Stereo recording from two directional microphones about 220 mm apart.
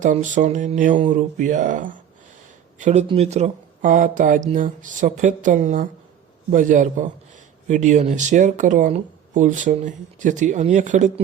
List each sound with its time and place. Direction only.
0.0 s speech: 35° right (ahead or behind)